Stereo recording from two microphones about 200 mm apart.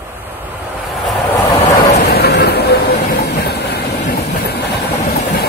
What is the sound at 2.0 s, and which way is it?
Vehicle, 55° left (ahead or behind).